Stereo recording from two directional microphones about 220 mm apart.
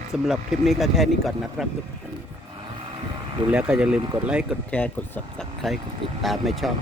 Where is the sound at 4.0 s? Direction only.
20° right (ahead or behind).